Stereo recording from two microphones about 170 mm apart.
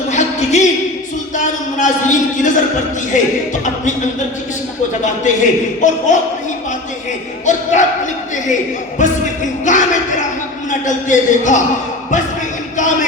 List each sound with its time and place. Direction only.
0.1 s a sound: 45° left (ahead or behind)
3.1 s music: 45° left (ahead or behind)
5.2 s music: 45° left (ahead or behind)
7.4 s music: 45° left (ahead or behind)
9.0 s music: 45° left (ahead or behind)
12.7 s music: 45° left (ahead or behind)